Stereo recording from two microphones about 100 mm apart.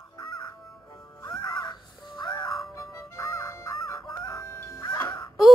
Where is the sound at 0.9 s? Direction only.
40° left (ahead or behind).